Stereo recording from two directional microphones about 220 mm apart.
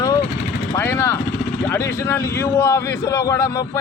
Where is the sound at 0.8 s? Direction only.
10° left (ahead or behind).